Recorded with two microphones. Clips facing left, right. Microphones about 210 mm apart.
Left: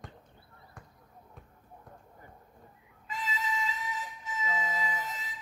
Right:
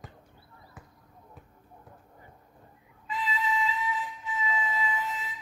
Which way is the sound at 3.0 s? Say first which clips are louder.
Right 5 dB; 45° left (ahead or behind).